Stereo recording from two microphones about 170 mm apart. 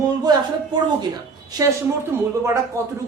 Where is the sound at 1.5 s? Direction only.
20° right (ahead or behind).